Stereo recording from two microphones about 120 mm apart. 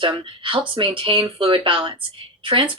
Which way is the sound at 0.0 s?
45° right (ahead or behind).